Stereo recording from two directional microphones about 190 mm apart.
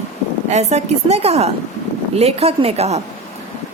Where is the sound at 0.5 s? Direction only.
35° right (ahead or behind).